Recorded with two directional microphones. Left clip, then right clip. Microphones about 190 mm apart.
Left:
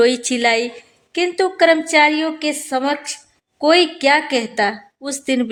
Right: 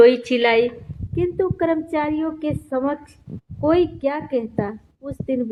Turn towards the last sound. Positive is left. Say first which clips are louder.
# left 5 dB
turn(degrees=35)  # may be behind; listen again after turning